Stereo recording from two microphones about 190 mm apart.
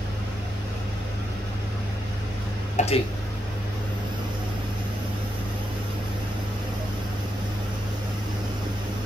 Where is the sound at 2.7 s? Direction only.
35° left (ahead or behind).